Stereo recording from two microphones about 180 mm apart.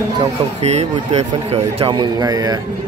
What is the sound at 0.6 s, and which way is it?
A man's voice, 40° right (ahead or behind).